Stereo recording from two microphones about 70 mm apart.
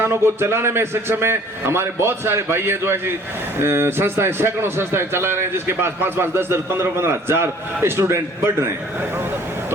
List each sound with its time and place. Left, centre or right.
0.0 s a man's voice: right